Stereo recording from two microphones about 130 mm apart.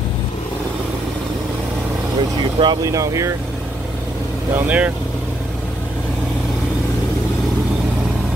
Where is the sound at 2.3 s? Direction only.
35° right (ahead or behind).